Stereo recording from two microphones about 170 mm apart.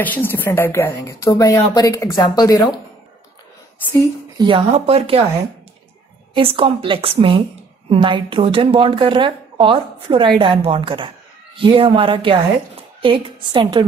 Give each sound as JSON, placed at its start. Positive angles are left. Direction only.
{"t": 0.0, "sound": "speech", "side_deg": 10}
{"t": 4.4, "sound": "speech", "side_deg": -30}
{"t": 6.3, "sound": "a woman's voice", "side_deg": -35}